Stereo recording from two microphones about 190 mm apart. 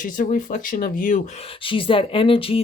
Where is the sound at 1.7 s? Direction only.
30° left (ahead or behind).